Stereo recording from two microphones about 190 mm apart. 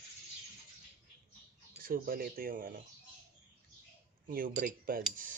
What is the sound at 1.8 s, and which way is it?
Speech, 50° right (ahead or behind).